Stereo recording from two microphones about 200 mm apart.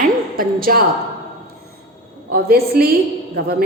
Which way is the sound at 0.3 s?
45° right (ahead or behind).